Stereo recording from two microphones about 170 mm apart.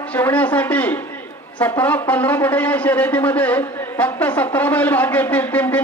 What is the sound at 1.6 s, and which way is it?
A man's voice, 10° left (ahead or behind).